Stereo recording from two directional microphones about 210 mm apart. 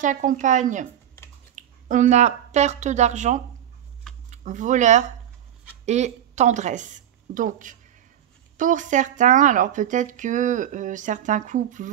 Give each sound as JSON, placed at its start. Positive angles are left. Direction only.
{"t": 0.0, "sound": "a woman's voice", "side_deg": -40}